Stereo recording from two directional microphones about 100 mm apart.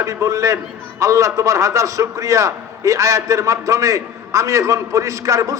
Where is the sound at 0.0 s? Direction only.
35° right (ahead or behind).